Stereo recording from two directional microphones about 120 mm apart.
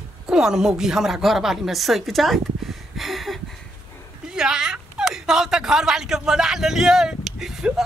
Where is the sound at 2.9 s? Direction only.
Centre (ahead or behind).